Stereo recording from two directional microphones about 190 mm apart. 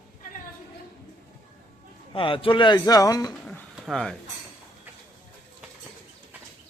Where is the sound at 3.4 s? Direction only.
5° left (ahead or behind).